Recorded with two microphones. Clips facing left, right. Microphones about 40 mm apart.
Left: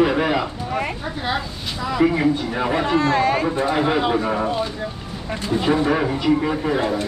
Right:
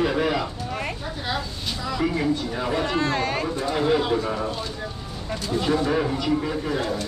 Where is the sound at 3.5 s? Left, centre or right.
Left.